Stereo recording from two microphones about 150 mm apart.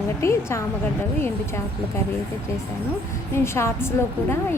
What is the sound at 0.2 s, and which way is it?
Speech, 20° left (ahead or behind).